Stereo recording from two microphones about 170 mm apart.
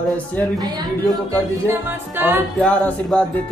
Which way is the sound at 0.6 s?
25° right (ahead or behind).